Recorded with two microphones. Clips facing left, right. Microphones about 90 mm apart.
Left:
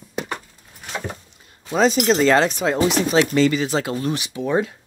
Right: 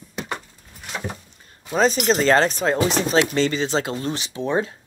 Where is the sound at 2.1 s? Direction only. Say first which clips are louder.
Left 1 dB; 40° right (ahead or behind).